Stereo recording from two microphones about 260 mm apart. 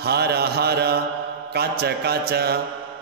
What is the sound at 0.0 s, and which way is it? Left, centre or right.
Mantra, right.